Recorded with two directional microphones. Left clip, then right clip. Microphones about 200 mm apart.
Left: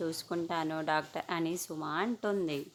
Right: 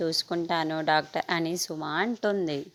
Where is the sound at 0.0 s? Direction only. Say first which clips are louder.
Right 7 dB; 25° right (ahead or behind).